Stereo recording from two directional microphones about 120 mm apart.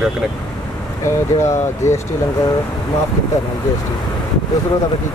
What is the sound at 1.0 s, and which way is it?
Speech, 25° left (ahead or behind).